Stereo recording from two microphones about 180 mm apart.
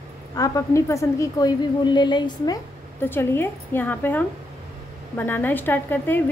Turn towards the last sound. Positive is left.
turn(degrees=10)  # may be behind; listen again after turning